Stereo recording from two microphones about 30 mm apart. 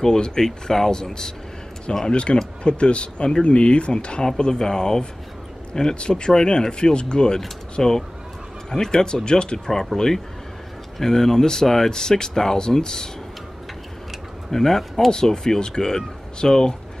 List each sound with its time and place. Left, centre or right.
0.2 s speech: left
0.5 s speech: centre
2.0 s speech: left
9.9 s speech: centre
11.9 s speech: left
14.5 s speech: centre
15.0 s speech: centre